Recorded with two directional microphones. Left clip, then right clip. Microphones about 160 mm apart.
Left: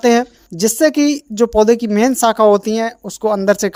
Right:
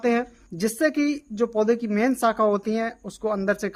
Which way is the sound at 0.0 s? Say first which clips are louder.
Left 10 dB; 45° left (ahead or behind).